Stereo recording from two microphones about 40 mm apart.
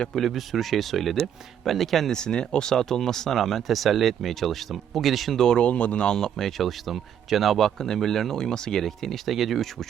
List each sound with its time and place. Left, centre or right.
0.1 s speech: centre
2.1 s speech: centre
5.5 s speech: left
6.1 s speech: centre
6.3 s speech: centre